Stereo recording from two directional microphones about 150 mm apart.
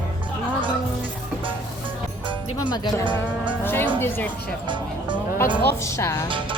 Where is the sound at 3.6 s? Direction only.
15° left (ahead or behind).